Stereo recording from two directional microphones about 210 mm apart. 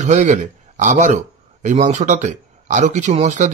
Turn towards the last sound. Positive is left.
turn(degrees=-35)  # may be behind; listen again after turning